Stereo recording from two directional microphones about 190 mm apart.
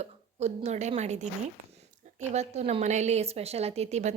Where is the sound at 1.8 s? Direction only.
40° right (ahead or behind).